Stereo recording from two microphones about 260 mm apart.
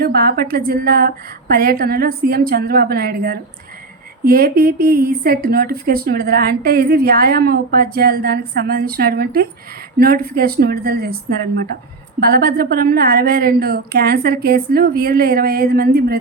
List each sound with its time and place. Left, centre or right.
0.0 s a woman's voice: right
12.3 s a woman's voice: right